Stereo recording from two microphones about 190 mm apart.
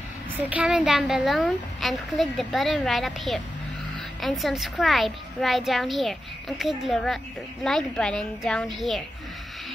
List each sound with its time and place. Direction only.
0.5 s a woman's voice: 5° right (ahead or behind)